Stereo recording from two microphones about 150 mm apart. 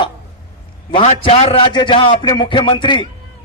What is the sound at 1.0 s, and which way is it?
A man's voice, 40° left (ahead or behind).